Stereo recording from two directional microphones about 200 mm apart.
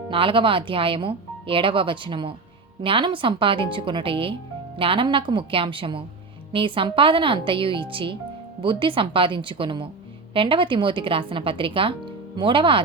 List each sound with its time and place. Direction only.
0.1 s speech: 25° right (ahead or behind)